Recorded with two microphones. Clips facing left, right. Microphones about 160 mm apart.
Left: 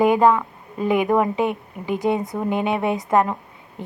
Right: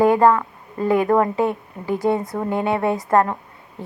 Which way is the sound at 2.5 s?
20° left (ahead or behind).